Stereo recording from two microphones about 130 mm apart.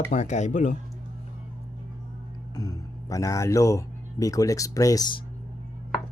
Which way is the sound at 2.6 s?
25° left (ahead or behind).